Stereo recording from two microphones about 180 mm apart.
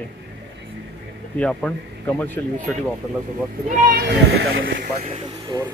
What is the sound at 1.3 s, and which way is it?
Speech, 5° left (ahead or behind).